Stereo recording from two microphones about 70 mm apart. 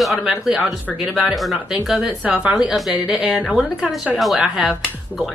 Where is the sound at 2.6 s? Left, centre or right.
Centre.